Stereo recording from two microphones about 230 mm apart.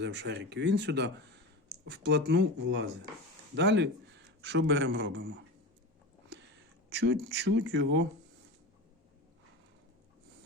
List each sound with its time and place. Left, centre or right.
0.0 s a man's voice: right
6.9 s speech: right